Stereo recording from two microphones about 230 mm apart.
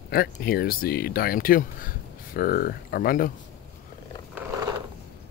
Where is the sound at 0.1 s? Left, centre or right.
Left.